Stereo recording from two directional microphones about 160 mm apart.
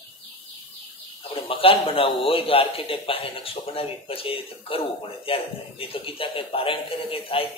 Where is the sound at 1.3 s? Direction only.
35° left (ahead or behind).